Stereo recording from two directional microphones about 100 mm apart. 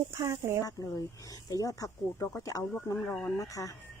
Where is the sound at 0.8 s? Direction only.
35° left (ahead or behind).